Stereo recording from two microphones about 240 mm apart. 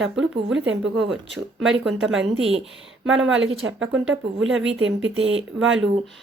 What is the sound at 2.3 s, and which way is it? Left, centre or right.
Speech, right.